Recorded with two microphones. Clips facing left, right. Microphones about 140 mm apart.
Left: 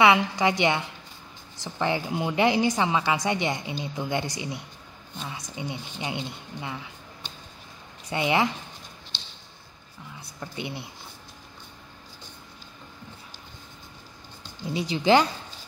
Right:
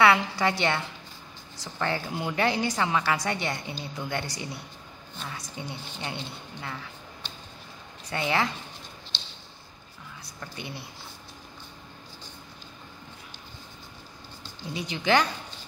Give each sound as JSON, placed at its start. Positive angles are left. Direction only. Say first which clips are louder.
{"t": 0.0, "sound": "a woman's voice", "louder": "left 2 dB", "side_deg": 20}
{"t": 8.1, "sound": "a woman's voice", "louder": "left 3 dB", "side_deg": 20}
{"t": 10.4, "sound": "a woman's voice", "louder": "left 4 dB", "side_deg": 20}
{"t": 14.7, "sound": "a woman's voice", "louder": "left 4 dB", "side_deg": 30}